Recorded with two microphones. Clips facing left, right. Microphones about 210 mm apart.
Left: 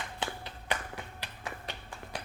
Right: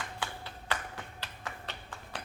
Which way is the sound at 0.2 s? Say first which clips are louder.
Left 2 dB; 20° left (ahead or behind).